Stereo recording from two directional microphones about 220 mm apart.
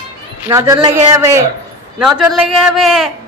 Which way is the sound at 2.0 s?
Centre (ahead or behind).